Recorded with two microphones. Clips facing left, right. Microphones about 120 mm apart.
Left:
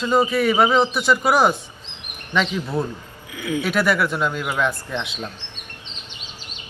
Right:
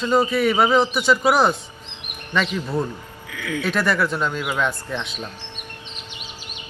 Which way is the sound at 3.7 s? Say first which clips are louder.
Even; 5° left (ahead or behind).